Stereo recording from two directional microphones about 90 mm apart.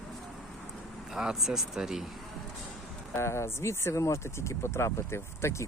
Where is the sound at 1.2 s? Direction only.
5° right (ahead or behind).